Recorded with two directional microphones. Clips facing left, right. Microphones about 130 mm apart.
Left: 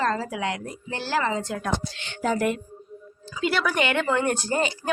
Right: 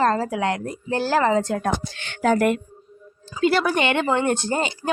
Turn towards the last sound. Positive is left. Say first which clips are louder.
# right 1 dB
turn(degrees=-25)  # may be behind; listen again after turning